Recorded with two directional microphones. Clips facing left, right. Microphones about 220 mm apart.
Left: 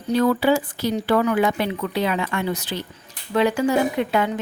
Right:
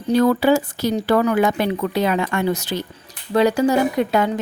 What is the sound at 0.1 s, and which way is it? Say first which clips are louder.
A woman's voice: right 3 dB; 45° right (ahead or behind).